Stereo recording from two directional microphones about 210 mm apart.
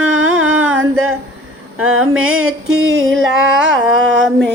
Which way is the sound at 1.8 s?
80° right.